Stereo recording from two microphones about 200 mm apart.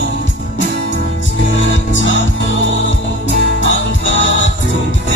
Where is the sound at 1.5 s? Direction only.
70° left (ahead or behind).